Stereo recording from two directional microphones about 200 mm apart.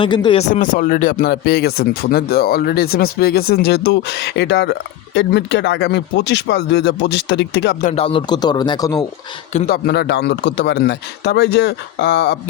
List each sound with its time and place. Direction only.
0.0 s speech: 25° left (ahead or behind); by 7.9 s 55° left (ahead or behind)
7.9 s a man's voice: 30° left (ahead or behind)
9.6 s speech: 50° left (ahead or behind)